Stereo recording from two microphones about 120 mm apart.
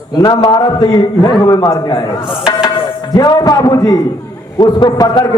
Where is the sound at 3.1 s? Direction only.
30° left (ahead or behind).